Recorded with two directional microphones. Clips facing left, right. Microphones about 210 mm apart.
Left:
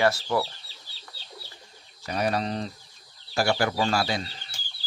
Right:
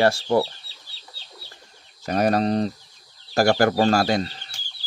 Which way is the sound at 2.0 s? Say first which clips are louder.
Right 7 dB; 45° right (ahead or behind).